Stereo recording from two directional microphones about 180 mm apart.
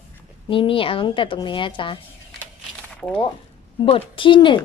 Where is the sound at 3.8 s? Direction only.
30° left (ahead or behind).